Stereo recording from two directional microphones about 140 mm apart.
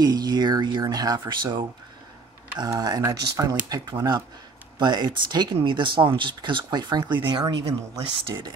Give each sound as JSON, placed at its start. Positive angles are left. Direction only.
{"t": 0.0, "sound": "speech", "side_deg": -30}